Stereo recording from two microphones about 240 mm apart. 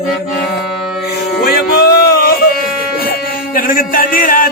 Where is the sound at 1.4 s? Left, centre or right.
Left.